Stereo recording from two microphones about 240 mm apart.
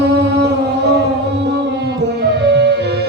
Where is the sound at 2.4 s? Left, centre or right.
Right.